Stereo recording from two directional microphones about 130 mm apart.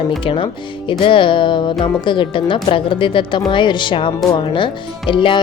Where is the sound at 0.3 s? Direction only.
40° left (ahead or behind).